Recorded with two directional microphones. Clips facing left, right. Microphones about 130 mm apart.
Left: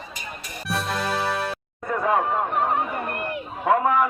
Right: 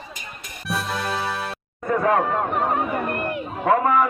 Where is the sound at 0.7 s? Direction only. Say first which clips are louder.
Even; centre (ahead or behind).